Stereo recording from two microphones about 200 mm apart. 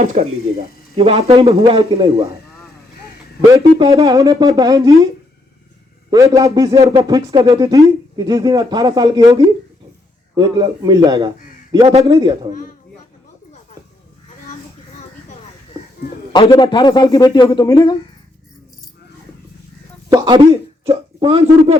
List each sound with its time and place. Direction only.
0.0 s speech: 35° right (ahead or behind)
3.5 s speech: 15° right (ahead or behind)
6.1 s speech: 15° right (ahead or behind)
16.3 s a man's voice: 25° left (ahead or behind)
20.1 s speech: 20° right (ahead or behind)